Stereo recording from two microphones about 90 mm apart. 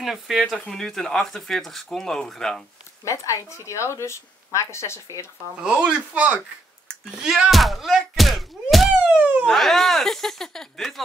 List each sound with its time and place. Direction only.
0.0 s speech: centre (ahead or behind)
3.1 s a woman's voice: 35° left (ahead or behind)
5.6 s speech: 10° right (ahead or behind)
9.0 s a sound: 15° right (ahead or behind)
9.4 s speech: 5° left (ahead or behind)